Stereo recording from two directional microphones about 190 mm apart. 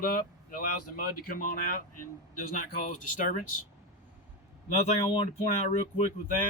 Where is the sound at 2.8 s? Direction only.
45° left (ahead or behind).